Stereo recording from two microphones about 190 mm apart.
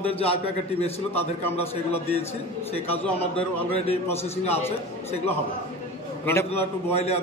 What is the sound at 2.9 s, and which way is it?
A man's voice, 30° left (ahead or behind).